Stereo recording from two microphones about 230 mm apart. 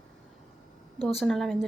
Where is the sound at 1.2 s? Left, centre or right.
Centre.